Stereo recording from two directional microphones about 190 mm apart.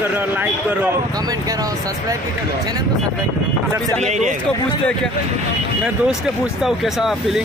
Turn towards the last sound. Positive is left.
turn(degrees=0)  # may be behind; listen again after turning